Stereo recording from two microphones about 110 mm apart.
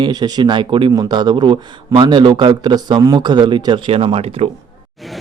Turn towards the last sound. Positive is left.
turn(degrees=-65)  # may be behind; listen again after turning